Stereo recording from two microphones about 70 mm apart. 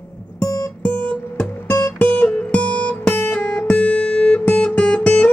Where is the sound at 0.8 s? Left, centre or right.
Left.